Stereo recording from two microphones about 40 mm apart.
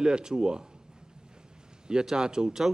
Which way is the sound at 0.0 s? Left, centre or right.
Centre.